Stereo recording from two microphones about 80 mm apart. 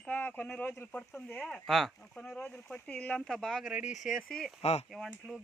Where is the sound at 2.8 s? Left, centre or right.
Centre.